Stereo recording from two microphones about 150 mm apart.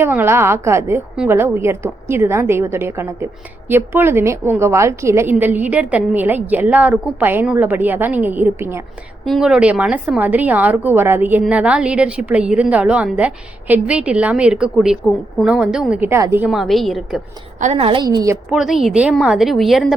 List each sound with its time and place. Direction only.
0.0 s a woman's voice: 15° right (ahead or behind)
9.2 s a woman's voice: centre (ahead or behind)
16.0 s a woman's voice: 15° right (ahead or behind)
16.5 s a woman's voice: centre (ahead or behind)
17.6 s a woman's voice: 45° right (ahead or behind); by 18.3 s 25° right (ahead or behind)
18.5 s a woman's voice: 5° right (ahead or behind)